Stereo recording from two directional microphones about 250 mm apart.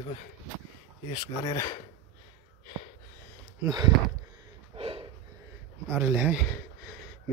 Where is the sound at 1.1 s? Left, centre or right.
Centre.